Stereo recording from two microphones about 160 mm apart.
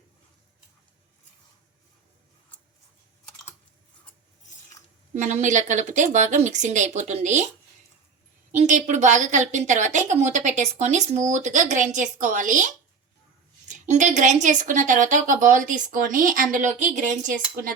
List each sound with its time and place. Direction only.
5.2 s a woman's voice: 50° right (ahead or behind)
8.5 s a woman's voice: 50° right (ahead or behind)